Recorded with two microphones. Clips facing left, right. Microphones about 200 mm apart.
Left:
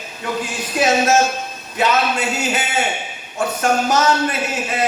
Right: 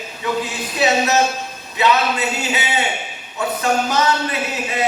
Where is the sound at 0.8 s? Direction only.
45° left (ahead or behind).